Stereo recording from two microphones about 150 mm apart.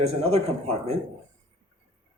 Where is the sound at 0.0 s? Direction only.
45° right (ahead or behind).